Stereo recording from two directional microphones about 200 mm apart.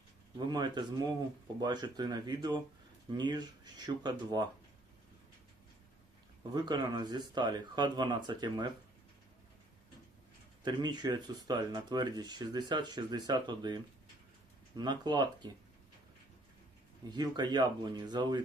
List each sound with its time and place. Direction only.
0.3 s speech: 20° right (ahead or behind)
6.5 s speech: 20° right (ahead or behind)
10.6 s speech: 20° right (ahead or behind)
17.1 s speech: 20° right (ahead or behind)